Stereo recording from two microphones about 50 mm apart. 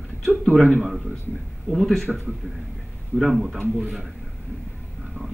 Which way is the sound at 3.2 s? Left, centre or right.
Centre.